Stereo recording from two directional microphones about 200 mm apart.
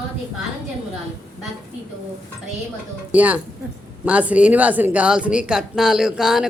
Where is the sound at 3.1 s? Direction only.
5° right (ahead or behind).